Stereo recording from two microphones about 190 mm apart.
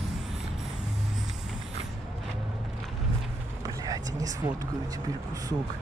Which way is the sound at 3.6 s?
20° right (ahead or behind).